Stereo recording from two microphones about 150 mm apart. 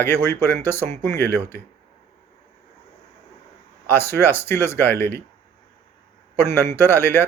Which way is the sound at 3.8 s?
15° left (ahead or behind).